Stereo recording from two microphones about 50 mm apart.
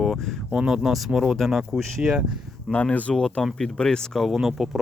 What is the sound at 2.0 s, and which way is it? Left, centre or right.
Speech, centre.